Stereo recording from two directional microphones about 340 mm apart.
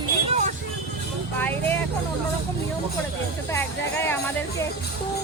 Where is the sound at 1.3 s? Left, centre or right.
Centre.